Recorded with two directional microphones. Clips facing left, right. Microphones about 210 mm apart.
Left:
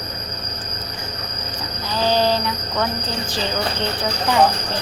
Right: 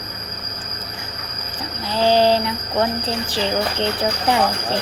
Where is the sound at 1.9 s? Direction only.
30° right (ahead or behind).